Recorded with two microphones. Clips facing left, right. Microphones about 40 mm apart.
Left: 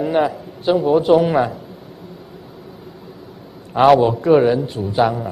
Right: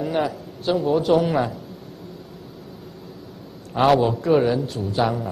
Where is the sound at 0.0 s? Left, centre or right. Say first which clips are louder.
Left 6 dB; centre.